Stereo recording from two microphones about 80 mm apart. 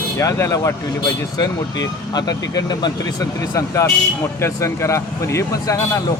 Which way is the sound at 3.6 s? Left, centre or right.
Left.